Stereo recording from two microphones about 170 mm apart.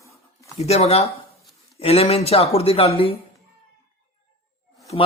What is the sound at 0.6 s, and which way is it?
Speech, 35° left (ahead or behind).